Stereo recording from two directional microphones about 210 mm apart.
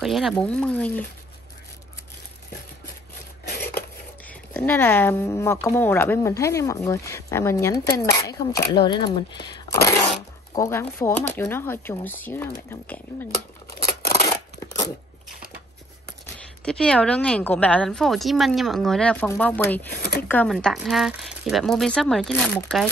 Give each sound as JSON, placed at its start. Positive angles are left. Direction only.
{"t": 0.0, "sound": "a woman's voice", "side_deg": 0}
{"t": 3.6, "sound": "speech", "side_deg": 10}
{"t": 16.6, "sound": "a woman's voice", "side_deg": 5}
{"t": 19.9, "sound": "speech", "side_deg": 50}
{"t": 20.2, "sound": "a woman's voice", "side_deg": 10}